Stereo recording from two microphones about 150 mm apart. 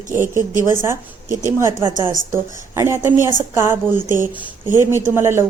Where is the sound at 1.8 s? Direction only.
35° right (ahead or behind).